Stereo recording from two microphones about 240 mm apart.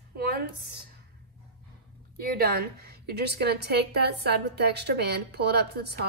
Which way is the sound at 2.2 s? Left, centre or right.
Right.